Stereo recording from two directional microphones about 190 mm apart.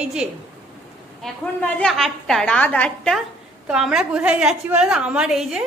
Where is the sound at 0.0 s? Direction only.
5° right (ahead or behind).